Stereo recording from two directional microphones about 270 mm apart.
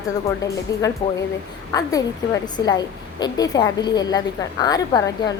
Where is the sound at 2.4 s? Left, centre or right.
Centre.